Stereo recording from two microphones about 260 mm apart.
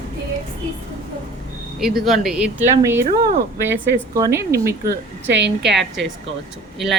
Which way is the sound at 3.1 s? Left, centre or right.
Right.